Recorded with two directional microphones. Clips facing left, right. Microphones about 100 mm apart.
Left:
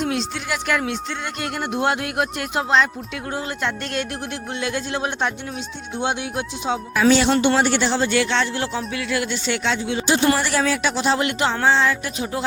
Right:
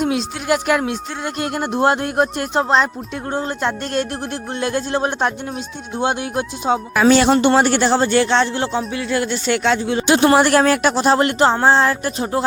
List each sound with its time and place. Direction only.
0.2 s speech: 50° right (ahead or behind)
1.2 s speech: 40° right (ahead or behind)
10.3 s speech: 55° right (ahead or behind)